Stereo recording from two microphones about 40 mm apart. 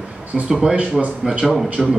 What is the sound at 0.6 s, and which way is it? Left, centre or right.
Speech, centre.